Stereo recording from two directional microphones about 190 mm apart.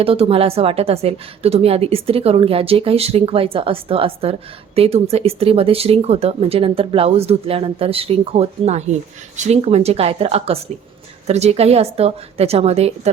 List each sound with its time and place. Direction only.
0.0 s a woman's voice: 30° right (ahead or behind)